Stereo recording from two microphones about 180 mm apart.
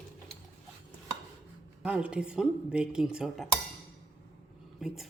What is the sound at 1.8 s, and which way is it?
A woman's voice, 5° right (ahead or behind).